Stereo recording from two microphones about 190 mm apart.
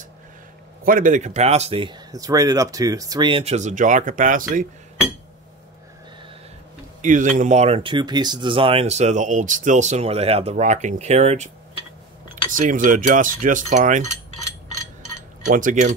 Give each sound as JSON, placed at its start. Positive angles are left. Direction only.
{"t": 0.8, "sound": "speech", "side_deg": -45}
{"t": 7.0, "sound": "speech", "side_deg": -40}
{"t": 12.4, "sound": "cutlery", "side_deg": -45}
{"t": 15.4, "sound": "speech", "side_deg": -40}